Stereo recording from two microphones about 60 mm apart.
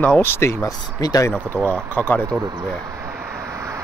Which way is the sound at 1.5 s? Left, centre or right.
Left.